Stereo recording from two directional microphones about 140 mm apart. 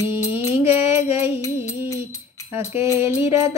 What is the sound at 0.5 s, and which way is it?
Music, 15° right (ahead or behind).